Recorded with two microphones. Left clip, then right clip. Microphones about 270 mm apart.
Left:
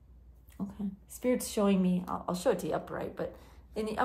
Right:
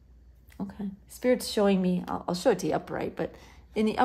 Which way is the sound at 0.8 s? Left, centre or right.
Centre.